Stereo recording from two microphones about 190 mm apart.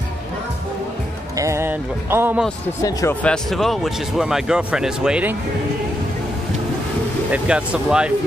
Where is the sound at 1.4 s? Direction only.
15° right (ahead or behind).